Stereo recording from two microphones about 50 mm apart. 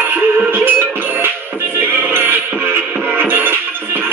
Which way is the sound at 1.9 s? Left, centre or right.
Right.